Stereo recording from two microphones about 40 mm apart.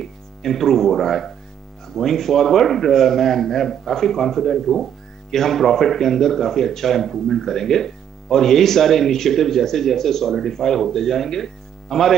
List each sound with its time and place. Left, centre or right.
0.0 s speech: centre